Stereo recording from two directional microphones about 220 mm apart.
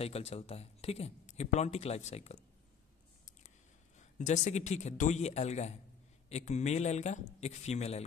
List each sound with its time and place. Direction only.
0.0 s speech: 30° left (ahead or behind)
4.0 s a man's voice: 35° left (ahead or behind)